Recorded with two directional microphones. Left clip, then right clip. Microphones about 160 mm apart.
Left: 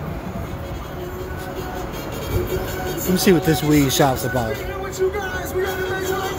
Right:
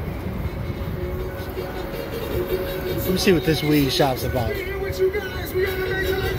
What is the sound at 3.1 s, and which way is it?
Speech, 35° left (ahead or behind).